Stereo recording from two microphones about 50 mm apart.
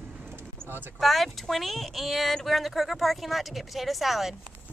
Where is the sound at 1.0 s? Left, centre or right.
Centre.